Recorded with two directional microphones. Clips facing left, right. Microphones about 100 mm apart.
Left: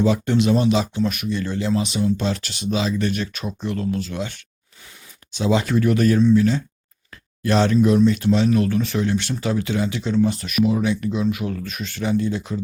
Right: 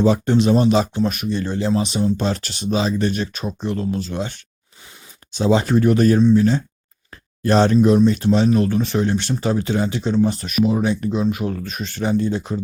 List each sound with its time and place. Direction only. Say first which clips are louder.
0.0 s speech: right 3 dB; 35° right (ahead or behind)